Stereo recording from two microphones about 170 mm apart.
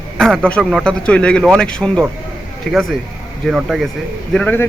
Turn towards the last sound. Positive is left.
turn(degrees=5)  # may be behind; listen again after turning